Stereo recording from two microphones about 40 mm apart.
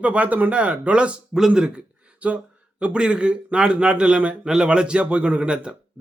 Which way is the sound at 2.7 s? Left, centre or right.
Right.